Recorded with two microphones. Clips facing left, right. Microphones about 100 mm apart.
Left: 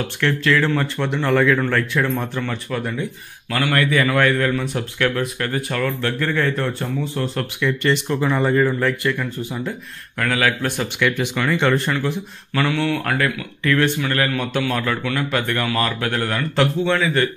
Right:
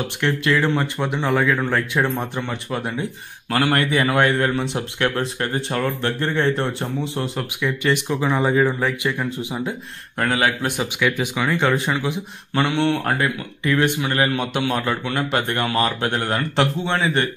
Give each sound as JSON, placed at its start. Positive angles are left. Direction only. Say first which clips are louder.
{"t": 0.2, "sound": "speech", "louder": "left 1 dB", "side_deg": -20}
{"t": 7.3, "sound": "speech", "louder": "left 2 dB", "side_deg": -10}
{"t": 10.1, "sound": "speech", "louder": "even", "side_deg": -30}
{"t": 10.6, "sound": "speech", "louder": "left 1 dB", "side_deg": -10}
{"t": 12.5, "sound": "speech", "louder": "right 1 dB", "side_deg": -25}
{"t": 13.7, "sound": "speech", "louder": "left 1 dB", "side_deg": -20}